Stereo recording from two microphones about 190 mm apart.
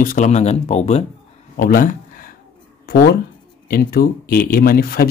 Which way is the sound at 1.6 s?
50° left (ahead or behind).